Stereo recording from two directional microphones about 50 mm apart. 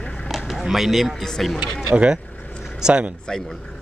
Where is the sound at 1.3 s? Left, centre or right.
Centre.